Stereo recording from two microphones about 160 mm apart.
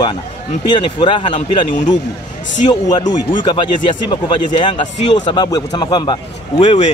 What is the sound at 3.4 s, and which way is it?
A man's voice, 30° left (ahead or behind).